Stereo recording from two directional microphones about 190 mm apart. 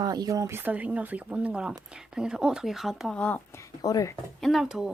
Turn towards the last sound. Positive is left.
turn(degrees=-5)  # may be behind; listen again after turning